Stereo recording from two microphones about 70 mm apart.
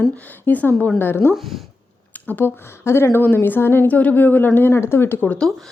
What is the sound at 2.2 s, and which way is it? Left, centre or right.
Speech, left.